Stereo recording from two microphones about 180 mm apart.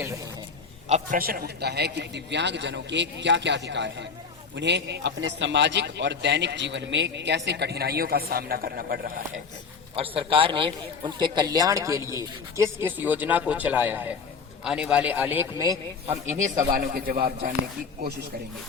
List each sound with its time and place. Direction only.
0.9 s a man's voice: 40° right (ahead or behind)
1.2 s a man's voice: 55° right (ahead or behind)
9.9 s a man's voice: 30° right (ahead or behind)
16.4 s speech: 50° right (ahead or behind)